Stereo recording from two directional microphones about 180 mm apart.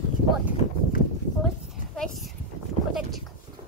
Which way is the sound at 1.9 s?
Centre (ahead or behind).